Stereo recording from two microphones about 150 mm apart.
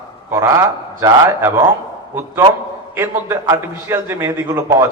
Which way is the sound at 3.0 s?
15° right (ahead or behind).